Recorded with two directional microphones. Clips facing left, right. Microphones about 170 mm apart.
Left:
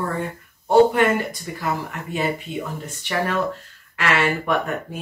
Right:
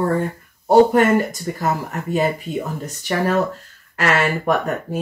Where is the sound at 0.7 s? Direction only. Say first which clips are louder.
Right 3 dB; 45° right (ahead or behind).